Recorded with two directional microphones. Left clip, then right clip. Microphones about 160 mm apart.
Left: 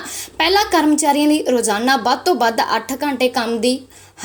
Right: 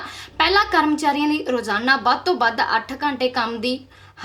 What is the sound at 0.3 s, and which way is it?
A woman's voice, 20° left (ahead or behind).